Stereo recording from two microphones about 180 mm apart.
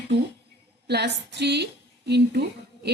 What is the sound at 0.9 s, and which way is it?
Speech, 65° right (ahead or behind).